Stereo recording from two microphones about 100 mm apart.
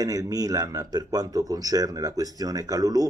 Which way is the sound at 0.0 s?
35° right (ahead or behind).